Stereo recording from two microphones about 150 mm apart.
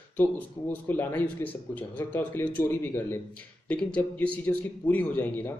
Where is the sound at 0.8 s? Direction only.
10° left (ahead or behind).